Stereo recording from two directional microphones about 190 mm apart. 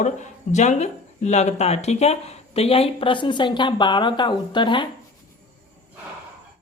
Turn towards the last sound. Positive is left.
turn(degrees=25)  # may be behind; listen again after turning